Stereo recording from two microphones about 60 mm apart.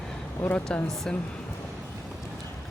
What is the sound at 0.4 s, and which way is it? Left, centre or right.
Speech, centre.